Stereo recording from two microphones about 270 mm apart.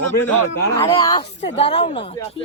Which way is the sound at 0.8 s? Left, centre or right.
Centre.